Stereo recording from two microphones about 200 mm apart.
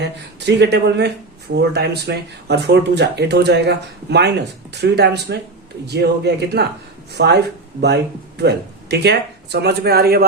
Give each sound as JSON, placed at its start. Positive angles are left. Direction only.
{"t": 0.0, "sound": "speech", "side_deg": -60}